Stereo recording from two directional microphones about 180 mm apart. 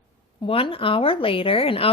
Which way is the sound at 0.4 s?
30° left (ahead or behind).